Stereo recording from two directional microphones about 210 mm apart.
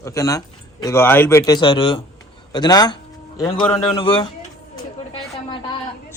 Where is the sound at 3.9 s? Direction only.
25° left (ahead or behind).